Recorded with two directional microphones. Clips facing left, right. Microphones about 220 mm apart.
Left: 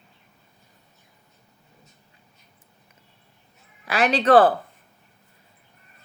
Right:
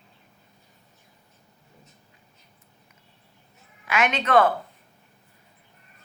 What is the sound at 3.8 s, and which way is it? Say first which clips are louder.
Speech: left 5 dB; 35° left (ahead or behind).